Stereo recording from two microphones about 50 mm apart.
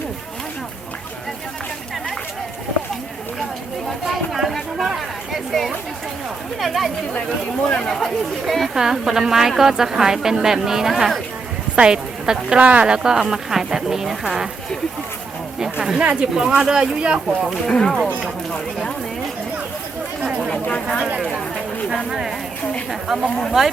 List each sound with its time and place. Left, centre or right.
3.8 s chatter: centre
6.6 s speech: centre
8.7 s a woman's voice: centre
12.5 s speech: right
12.9 s a woman's voice: centre
15.5 s a sound: centre
16.0 s a woman's voice: right
17.7 s speech: centre
20.5 s speech: left
22.9 s a woman's voice: centre